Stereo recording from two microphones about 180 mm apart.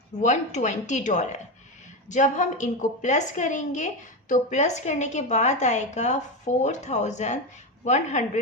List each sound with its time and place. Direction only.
0.2 s a woman's voice: 40° left (ahead or behind)